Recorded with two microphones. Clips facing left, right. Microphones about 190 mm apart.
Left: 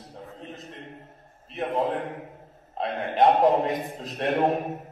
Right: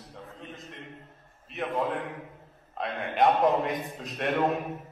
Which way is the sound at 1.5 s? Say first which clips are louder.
Left 3 dB; 30° left (ahead or behind).